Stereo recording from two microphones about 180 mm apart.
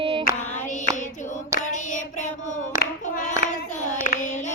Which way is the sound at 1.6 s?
40° left (ahead or behind).